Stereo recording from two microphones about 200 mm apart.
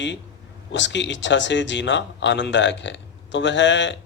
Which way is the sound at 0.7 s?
65° left (ahead or behind).